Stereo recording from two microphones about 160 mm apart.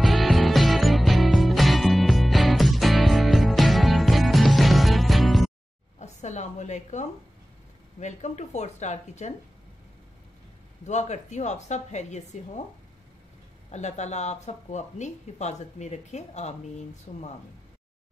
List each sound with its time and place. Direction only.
0.0 s music: centre (ahead or behind)
5.9 s a sound: 45° left (ahead or behind)
8.0 s speech: 45° left (ahead or behind)
10.9 s speech: 45° left (ahead or behind)
13.7 s speech: 45° left (ahead or behind)